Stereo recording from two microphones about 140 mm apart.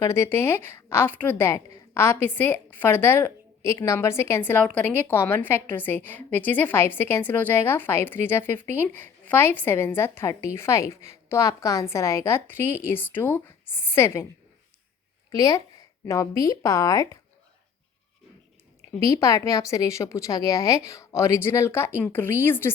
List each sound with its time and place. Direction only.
0.0 s a woman's voice: 20° left (ahead or behind)
15.3 s a woman's voice: 25° left (ahead or behind)
19.0 s a woman's voice: 25° left (ahead or behind)